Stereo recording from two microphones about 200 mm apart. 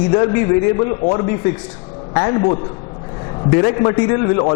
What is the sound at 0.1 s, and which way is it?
A man's voice, 25° left (ahead or behind).